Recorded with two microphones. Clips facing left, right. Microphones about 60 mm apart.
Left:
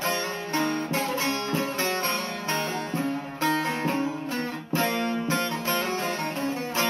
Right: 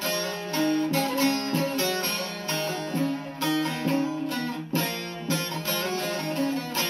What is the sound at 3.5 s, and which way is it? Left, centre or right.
Guitar, left.